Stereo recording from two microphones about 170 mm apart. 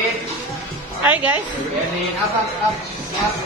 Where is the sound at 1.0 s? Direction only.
10° right (ahead or behind).